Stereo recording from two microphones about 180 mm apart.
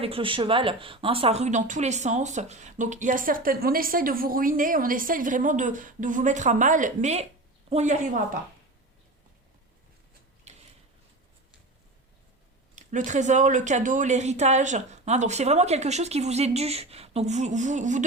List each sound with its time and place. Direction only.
0.0 s speech: 30° right (ahead or behind)
13.1 s speech: 40° right (ahead or behind)